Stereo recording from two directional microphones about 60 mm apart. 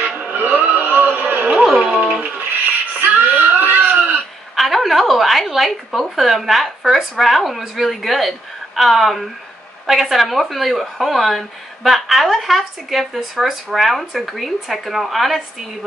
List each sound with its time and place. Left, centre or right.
0.0 s music: right
1.5 s music: centre
1.8 s a sound: right
4.6 s a woman's voice: centre